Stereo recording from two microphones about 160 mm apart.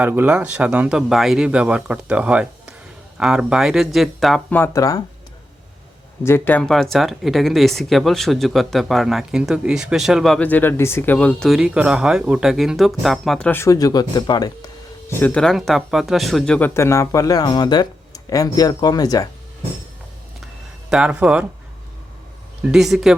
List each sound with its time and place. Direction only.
0.0 s speech: 10° right (ahead or behind)
4.5 s speech: 15° left (ahead or behind)
6.2 s speech: 15° left (ahead or behind)
13.5 s speech: 20° left (ahead or behind)
15.1 s speech: 10° left (ahead or behind)
16.6 s speech: 15° left (ahead or behind)
20.9 s speech: 5° right (ahead or behind)
22.6 s speech: 5° right (ahead or behind)